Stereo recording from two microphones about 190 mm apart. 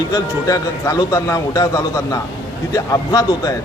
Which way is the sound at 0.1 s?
20° left (ahead or behind).